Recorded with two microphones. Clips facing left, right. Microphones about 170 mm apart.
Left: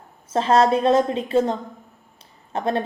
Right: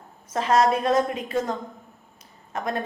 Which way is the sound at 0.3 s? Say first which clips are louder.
Left 3 dB; 30° left (ahead or behind).